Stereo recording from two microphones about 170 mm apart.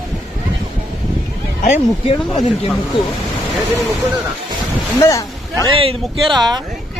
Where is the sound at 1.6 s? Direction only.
40° left (ahead or behind).